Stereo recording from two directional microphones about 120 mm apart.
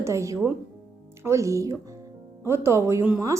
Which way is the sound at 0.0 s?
25° right (ahead or behind).